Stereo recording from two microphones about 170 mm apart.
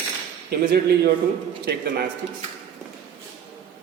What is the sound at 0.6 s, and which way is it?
A man's voice, 65° right (ahead or behind).